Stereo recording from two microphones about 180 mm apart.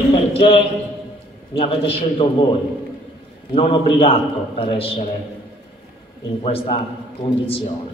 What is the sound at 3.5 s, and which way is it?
A man's voice, 30° left (ahead or behind).